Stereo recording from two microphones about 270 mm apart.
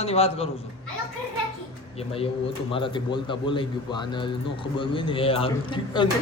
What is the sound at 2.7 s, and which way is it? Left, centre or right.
A man's voice, centre.